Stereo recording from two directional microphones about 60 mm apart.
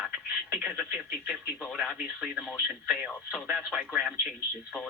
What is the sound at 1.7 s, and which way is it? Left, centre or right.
Speech, centre.